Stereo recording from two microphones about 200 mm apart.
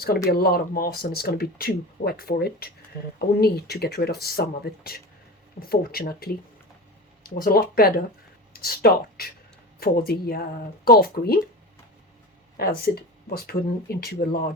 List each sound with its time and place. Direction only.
0.3 s speech: 50° left (ahead or behind)
7.3 s speech: 45° left (ahead or behind)
12.5 s speech: 50° left (ahead or behind)